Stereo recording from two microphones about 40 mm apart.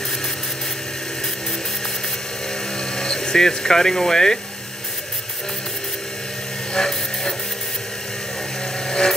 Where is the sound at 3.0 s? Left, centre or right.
Centre.